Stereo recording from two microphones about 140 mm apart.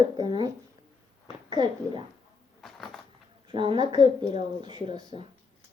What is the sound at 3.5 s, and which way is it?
Speech, 35° right (ahead or behind).